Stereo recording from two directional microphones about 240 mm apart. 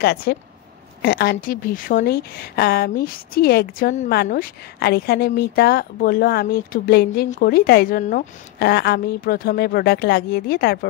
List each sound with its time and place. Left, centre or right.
0.0 s a woman's voice: left